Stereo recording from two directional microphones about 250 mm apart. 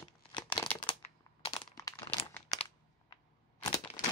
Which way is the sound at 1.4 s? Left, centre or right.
Centre.